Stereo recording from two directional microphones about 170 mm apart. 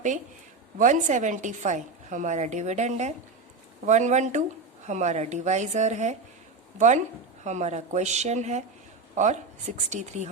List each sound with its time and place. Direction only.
0.8 s a woman's voice: 45° right (ahead or behind)